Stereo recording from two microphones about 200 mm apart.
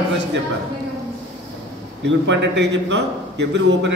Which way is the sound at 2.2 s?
60° right (ahead or behind).